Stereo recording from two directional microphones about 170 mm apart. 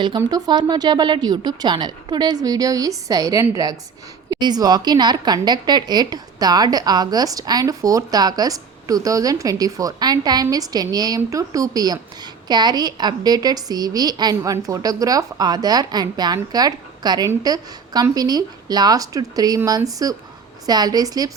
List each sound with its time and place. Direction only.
0.2 s a woman's voice: 25° right (ahead or behind)